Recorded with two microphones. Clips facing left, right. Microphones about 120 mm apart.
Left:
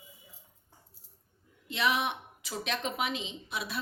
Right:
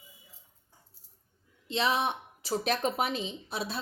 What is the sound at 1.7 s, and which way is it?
A woman's voice, 30° right (ahead or behind).